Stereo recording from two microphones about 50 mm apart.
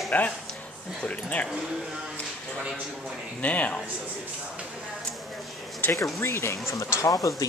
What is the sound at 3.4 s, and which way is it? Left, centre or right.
Speech, left.